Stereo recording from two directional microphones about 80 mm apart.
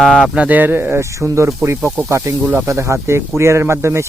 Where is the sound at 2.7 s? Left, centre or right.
Right.